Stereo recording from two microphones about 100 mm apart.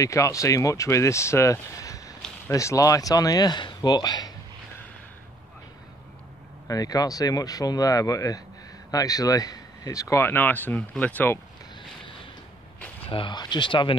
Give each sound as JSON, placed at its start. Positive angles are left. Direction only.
{"t": 0.0, "sound": "speech", "side_deg": 35}
{"t": 6.7, "sound": "speech", "side_deg": 40}
{"t": 13.0, "sound": "speech", "side_deg": 65}
{"t": 13.3, "sound": "speech", "side_deg": 45}